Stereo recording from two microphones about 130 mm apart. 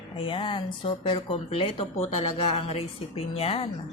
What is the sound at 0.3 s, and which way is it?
Speech, 40° left (ahead or behind).